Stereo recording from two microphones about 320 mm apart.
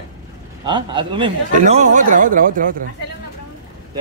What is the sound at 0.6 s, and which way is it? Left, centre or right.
Speech, centre.